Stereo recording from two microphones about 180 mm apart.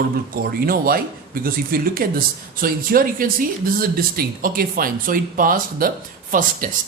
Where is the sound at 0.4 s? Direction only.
55° right (ahead or behind).